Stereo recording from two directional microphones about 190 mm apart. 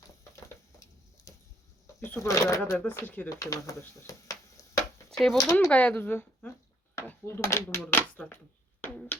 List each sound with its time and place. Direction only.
2.0 s speech: 15° left (ahead or behind)
5.1 s speech: centre (ahead or behind)
5.4 s speech: 15° left (ahead or behind)
8.8 s a sound: 10° left (ahead or behind)